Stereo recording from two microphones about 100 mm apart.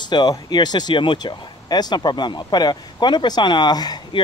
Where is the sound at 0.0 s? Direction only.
45° left (ahead or behind).